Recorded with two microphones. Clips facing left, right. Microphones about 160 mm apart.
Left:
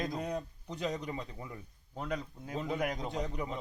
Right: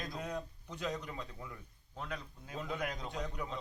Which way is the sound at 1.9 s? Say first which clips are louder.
Left 6 dB; 40° left (ahead or behind).